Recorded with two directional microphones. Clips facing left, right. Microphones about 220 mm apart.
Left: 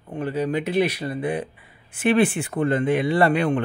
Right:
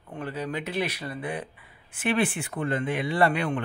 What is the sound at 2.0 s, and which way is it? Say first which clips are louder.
Speech: left 7 dB; 30° left (ahead or behind).